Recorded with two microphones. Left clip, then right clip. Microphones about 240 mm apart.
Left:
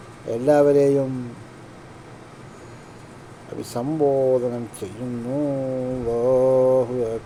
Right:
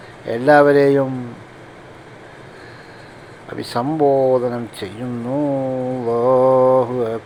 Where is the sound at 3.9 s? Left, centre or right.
Right.